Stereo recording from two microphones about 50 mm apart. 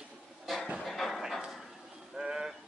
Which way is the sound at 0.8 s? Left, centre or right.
Centre.